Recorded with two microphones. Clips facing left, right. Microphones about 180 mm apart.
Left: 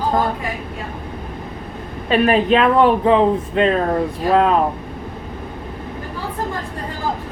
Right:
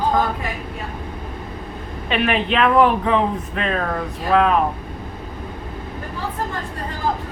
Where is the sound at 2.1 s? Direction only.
40° left (ahead or behind).